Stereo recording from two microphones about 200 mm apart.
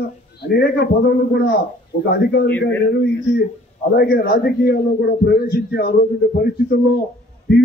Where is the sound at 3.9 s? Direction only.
50° left (ahead or behind).